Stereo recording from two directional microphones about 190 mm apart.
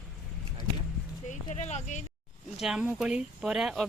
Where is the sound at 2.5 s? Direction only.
Centre (ahead or behind).